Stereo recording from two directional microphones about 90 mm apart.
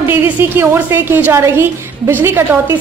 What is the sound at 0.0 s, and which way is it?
A woman's voice, 25° right (ahead or behind).